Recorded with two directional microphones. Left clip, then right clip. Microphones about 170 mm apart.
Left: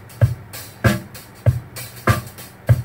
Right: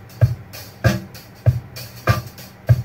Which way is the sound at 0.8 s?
40° right (ahead or behind).